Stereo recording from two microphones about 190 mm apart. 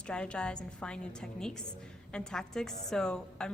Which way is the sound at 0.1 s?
5° left (ahead or behind).